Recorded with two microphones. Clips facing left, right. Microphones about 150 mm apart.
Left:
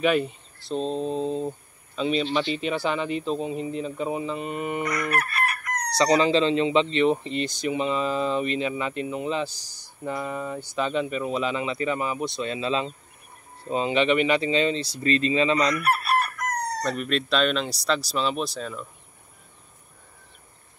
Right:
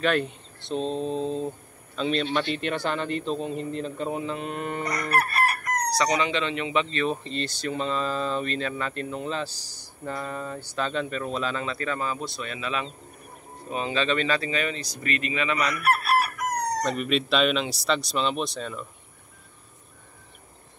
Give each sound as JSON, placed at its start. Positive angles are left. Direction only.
{"t": 0.0, "sound": "a man's voice", "side_deg": 5}
{"t": 5.1, "sound": "chicken", "side_deg": -40}
{"t": 5.9, "sound": "speech", "side_deg": 30}
{"t": 15.7, "sound": "chicken", "side_deg": 0}
{"t": 16.8, "sound": "speech", "side_deg": 0}